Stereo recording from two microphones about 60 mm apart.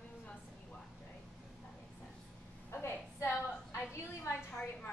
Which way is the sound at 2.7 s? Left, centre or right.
Left.